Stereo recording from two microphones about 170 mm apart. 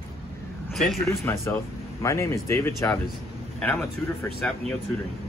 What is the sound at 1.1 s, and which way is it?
Speech, 15° left (ahead or behind).